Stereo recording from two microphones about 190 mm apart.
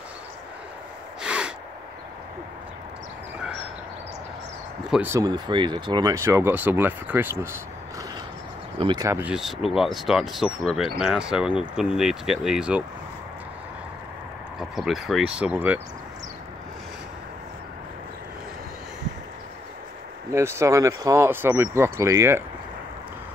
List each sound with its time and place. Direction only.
1.2 s gasp: 5° right (ahead or behind)
4.9 s speech: 10° right (ahead or behind)
8.7 s speech: 25° right (ahead or behind)
9.2 s speech: centre (ahead or behind)
14.6 s speech: centre (ahead or behind)
20.3 s speech: 15° right (ahead or behind)